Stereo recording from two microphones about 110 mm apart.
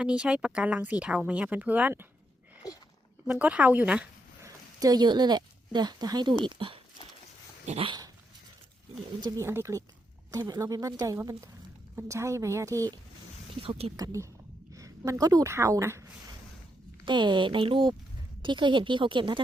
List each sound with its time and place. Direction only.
0.0 s speech: 10° right (ahead or behind)
2.6 s a sound: 35° left (ahead or behind)
3.2 s speech: 15° right (ahead or behind)
4.4 s speech: 35° right (ahead or behind)
7.6 s dog: 90° right
7.9 s dog: 40° right (ahead or behind)
9.2 s a woman's voice: 35° right (ahead or behind)
9.5 s a woman's voice: 25° right (ahead or behind)
13.6 s speech: 60° right (ahead or behind)
13.9 s a woman's voice: 30° right (ahead or behind)
14.7 s a sound: 30° right (ahead or behind)
15.5 s a woman's voice: 25° right (ahead or behind)
17.1 s speech: 45° right (ahead or behind)